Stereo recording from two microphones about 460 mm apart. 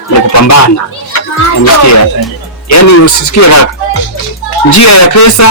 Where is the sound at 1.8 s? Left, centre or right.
Left.